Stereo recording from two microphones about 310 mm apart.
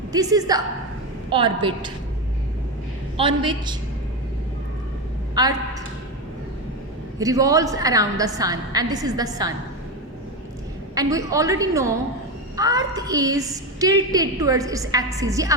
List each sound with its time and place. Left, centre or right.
0.1 s a woman's voice: centre
3.2 s a woman's voice: centre
5.3 s a woman's voice: centre
7.2 s a woman's voice: centre
10.9 s a woman's voice: centre